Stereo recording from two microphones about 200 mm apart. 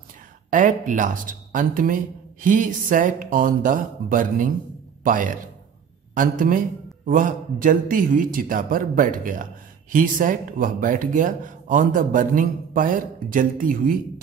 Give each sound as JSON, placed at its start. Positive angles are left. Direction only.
{"t": 0.5, "sound": "speech", "side_deg": -40}